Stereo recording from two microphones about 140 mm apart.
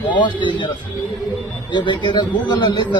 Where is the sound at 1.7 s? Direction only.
35° left (ahead or behind).